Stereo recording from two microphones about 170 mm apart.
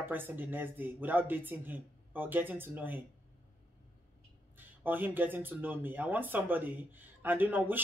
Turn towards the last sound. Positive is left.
turn(degrees=-10)  # may be behind; listen again after turning